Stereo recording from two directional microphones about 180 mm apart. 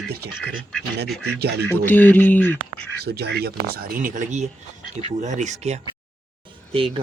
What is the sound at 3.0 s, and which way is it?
A man's voice, 60° right (ahead or behind).